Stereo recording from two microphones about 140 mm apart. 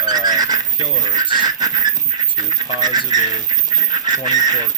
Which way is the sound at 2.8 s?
30° right (ahead or behind).